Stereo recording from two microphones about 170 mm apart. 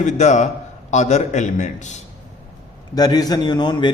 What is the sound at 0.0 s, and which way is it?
A man's voice, 45° left (ahead or behind).